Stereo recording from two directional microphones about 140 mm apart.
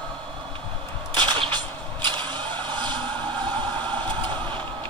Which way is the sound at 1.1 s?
35° right (ahead or behind).